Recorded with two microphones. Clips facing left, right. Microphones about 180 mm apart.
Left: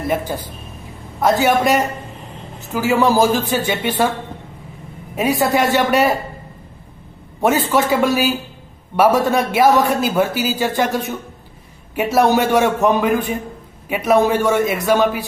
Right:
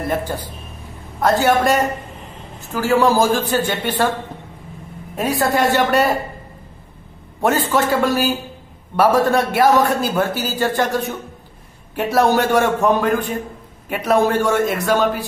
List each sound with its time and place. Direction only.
1.2 s speech: 15° left (ahead or behind)
5.1 s speech: 15° left (ahead or behind)
7.4 s speech: 10° left (ahead or behind)